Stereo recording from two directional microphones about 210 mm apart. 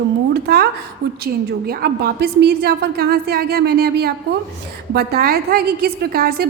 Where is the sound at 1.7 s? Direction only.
45° right (ahead or behind).